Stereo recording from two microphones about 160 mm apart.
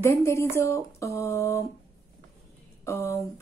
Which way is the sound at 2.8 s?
15° left (ahead or behind).